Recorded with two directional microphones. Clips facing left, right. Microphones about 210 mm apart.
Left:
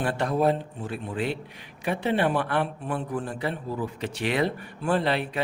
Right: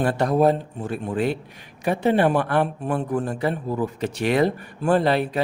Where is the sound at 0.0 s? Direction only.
40° right (ahead or behind).